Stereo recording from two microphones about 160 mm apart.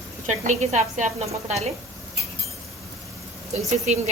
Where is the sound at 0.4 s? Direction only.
50° right (ahead or behind).